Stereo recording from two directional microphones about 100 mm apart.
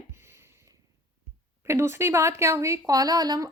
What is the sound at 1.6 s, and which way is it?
Speech, 25° right (ahead or behind).